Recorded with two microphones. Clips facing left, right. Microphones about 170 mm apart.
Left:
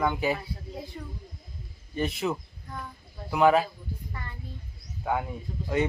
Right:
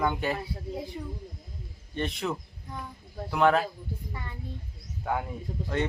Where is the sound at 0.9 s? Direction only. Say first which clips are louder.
Right 3 dB; 15° right (ahead or behind).